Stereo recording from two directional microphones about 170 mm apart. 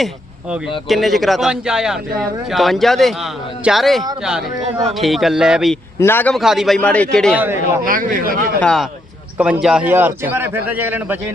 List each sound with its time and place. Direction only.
0.9 s speech: centre (ahead or behind)
6.0 s a man's voice: 15° left (ahead or behind)
6.3 s speech: centre (ahead or behind)
7.9 s speech: 55° right (ahead or behind)
8.6 s a man's voice: centre (ahead or behind)